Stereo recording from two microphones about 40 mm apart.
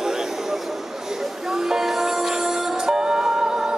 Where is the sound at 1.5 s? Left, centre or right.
Centre.